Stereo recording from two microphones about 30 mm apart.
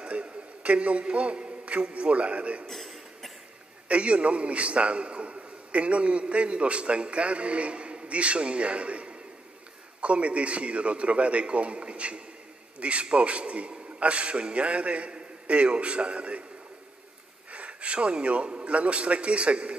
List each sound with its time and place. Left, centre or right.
0.0 s a man's voice: right
2.7 s a sound: centre
3.9 s a man's voice: right
17.5 s a man's voice: right